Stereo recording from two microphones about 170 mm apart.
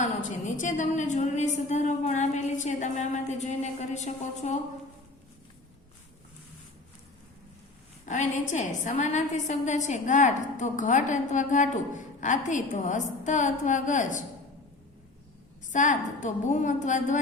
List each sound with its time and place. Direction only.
0.0 s a woman's voice: 50° left (ahead or behind)
8.0 s a woman's voice: 45° left (ahead or behind)
15.7 s a woman's voice: 45° left (ahead or behind)